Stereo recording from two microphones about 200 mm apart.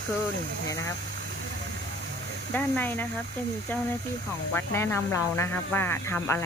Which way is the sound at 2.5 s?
10° left (ahead or behind).